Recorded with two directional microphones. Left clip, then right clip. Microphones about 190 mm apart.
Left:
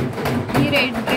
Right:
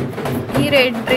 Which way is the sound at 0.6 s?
15° right (ahead or behind).